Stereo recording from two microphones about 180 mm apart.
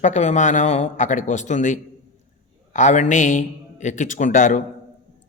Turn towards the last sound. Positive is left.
turn(degrees=45)  # may be behind; listen again after turning